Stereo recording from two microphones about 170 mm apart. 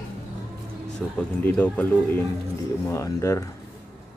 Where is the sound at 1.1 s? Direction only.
10° left (ahead or behind).